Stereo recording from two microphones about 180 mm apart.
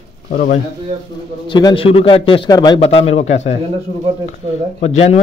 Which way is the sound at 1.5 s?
25° left (ahead or behind).